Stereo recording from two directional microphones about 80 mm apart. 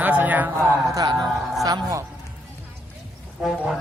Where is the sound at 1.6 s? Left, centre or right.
Right.